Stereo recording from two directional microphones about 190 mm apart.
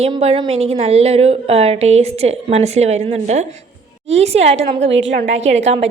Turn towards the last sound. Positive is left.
turn(degrees=-35)  # may be behind; listen again after turning